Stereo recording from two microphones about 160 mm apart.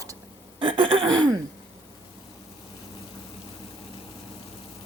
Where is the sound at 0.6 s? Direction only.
30° right (ahead or behind).